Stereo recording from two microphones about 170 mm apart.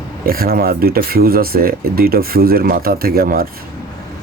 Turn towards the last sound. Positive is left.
turn(degrees=-60)  # may be behind; listen again after turning